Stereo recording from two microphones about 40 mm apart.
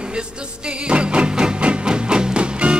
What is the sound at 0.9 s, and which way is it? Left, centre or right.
Music, right.